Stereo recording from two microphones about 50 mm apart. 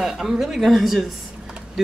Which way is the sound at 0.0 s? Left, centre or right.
Centre.